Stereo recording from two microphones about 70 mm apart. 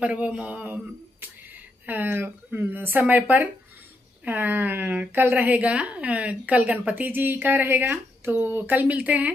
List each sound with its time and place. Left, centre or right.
0.0 s a woman's voice: centre
1.2 s a sound: right
2.8 s a woman's voice: right